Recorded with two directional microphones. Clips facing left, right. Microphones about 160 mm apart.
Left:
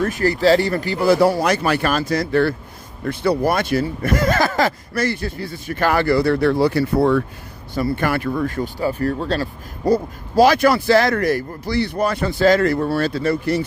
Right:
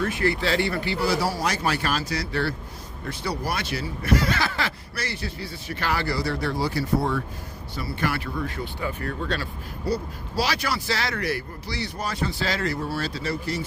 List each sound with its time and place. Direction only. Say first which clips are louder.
0.0 s speech: left 7 dB; 40° left (ahead or behind); by 7.2 s 60° left (ahead or behind)
7.7 s speech: left 8 dB; 50° left (ahead or behind)